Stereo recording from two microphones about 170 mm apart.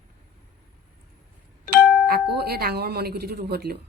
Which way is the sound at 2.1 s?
65° right (ahead or behind).